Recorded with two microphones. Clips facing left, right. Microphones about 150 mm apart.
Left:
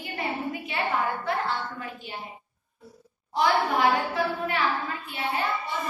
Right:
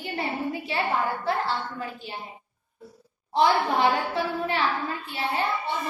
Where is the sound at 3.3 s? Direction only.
30° right (ahead or behind).